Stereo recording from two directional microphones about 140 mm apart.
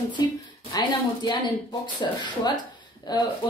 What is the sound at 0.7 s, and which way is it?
A woman's voice, 30° left (ahead or behind).